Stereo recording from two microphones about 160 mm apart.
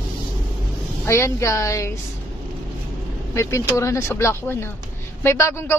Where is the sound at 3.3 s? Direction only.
20° left (ahead or behind).